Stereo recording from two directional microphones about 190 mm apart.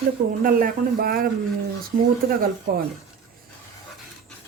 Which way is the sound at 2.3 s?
50° right (ahead or behind).